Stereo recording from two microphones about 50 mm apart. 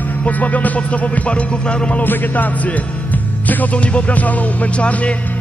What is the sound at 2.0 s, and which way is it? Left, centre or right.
Speech, left.